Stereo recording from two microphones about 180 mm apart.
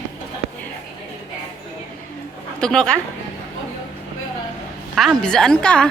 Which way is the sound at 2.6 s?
5° left (ahead or behind).